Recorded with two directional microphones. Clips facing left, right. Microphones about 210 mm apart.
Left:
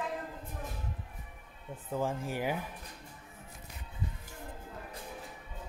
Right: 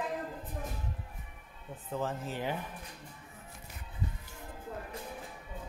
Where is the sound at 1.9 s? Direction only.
10° left (ahead or behind).